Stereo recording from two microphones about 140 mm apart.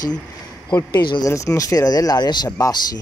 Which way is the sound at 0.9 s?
30° left (ahead or behind).